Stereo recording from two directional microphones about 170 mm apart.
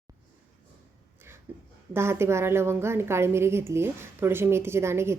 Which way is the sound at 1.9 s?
15° right (ahead or behind).